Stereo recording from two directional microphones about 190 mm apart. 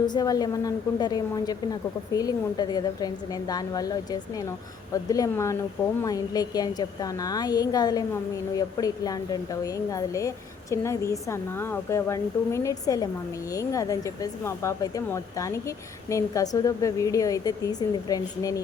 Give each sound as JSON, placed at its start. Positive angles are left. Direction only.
{"t": 0.0, "sound": "a woman's voice", "side_deg": 20}